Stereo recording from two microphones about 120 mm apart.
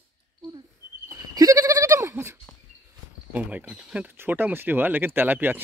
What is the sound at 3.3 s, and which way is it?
Speech, 10° right (ahead or behind).